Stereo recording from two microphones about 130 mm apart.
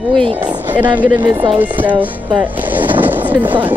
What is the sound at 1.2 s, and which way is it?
Speech, 40° right (ahead or behind).